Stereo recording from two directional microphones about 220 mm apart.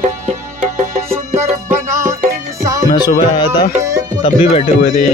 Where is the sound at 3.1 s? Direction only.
20° left (ahead or behind).